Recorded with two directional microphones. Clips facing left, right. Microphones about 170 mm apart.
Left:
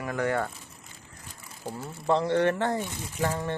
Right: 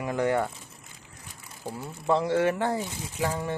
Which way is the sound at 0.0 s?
20° right (ahead or behind).